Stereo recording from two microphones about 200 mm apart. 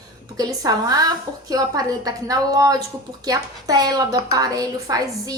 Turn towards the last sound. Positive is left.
turn(degrees=-20)  # may be behind; listen again after turning